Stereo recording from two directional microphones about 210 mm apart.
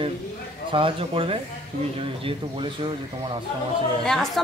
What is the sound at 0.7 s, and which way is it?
Speech, 25° right (ahead or behind).